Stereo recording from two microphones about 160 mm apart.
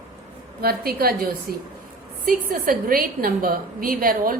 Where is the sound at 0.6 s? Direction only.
70° right (ahead or behind).